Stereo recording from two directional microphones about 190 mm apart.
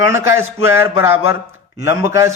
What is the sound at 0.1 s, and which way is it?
Speech, 10° right (ahead or behind).